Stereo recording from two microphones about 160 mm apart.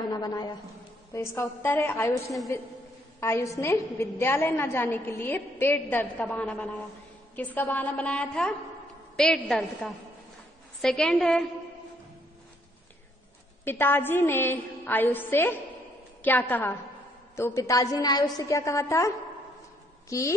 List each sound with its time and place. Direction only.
0.1 s a woman's voice: 25° left (ahead or behind); by 11.4 s centre (ahead or behind)
13.7 s a woman's voice: 15° left (ahead or behind)